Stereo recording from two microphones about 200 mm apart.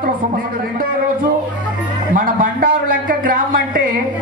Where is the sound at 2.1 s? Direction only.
40° right (ahead or behind).